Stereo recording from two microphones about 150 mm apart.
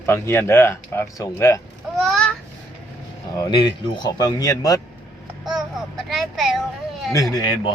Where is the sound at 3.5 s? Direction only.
30° left (ahead or behind).